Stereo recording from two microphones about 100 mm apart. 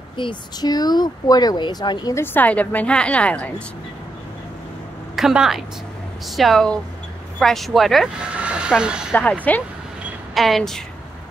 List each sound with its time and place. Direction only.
0.2 s speech: 50° left (ahead or behind)
2.1 s a woman's voice: 15° left (ahead or behind)
5.1 s a woman's voice: 5° right (ahead or behind)
8.4 s train: 10° right (ahead or behind)
9.1 s a woman's voice: 15° left (ahead or behind)
10.3 s speech: centre (ahead or behind)